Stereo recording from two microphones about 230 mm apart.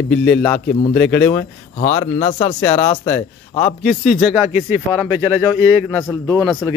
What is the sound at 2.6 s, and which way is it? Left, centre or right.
Speech, centre.